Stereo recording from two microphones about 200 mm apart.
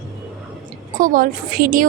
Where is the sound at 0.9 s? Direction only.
45° right (ahead or behind).